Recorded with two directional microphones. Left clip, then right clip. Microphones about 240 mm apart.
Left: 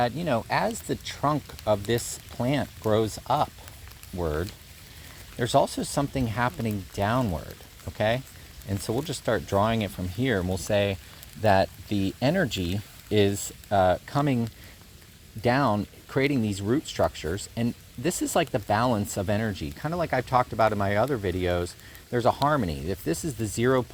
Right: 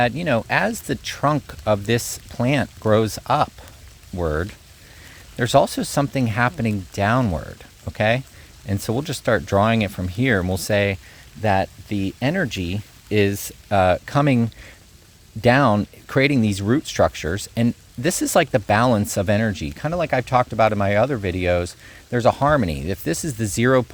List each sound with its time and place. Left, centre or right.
0.0 s speech: right
11.4 s speech: right
13.7 s speech: right